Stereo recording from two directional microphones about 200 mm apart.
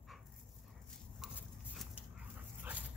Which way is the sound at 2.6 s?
10° right (ahead or behind).